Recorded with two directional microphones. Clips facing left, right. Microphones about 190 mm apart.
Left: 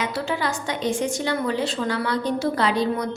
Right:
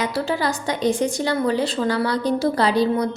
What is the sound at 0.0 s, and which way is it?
Speech, 35° right (ahead or behind).